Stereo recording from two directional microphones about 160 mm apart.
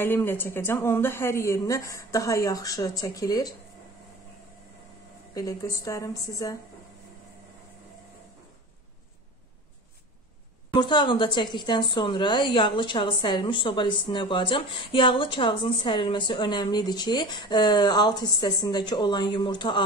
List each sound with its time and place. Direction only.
0.0 s a woman's voice: 15° left (ahead or behind)
5.3 s a woman's voice: 20° left (ahead or behind)
10.7 s a woman's voice: 30° left (ahead or behind)